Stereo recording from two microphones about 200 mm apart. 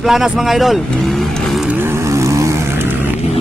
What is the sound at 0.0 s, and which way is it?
Speech, centre (ahead or behind).